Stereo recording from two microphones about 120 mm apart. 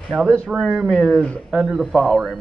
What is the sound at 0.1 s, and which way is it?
Speech, 20° right (ahead or behind).